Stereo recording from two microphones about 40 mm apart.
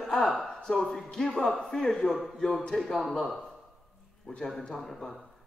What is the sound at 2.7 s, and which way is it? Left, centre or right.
Speech, centre.